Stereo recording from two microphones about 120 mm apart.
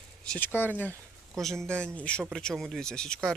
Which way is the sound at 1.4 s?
5° left (ahead or behind).